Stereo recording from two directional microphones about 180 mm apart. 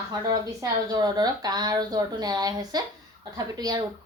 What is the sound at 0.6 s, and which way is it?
Speech, 20° right (ahead or behind).